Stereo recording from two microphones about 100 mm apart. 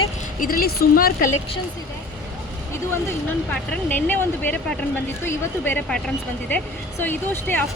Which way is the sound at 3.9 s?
20° left (ahead or behind).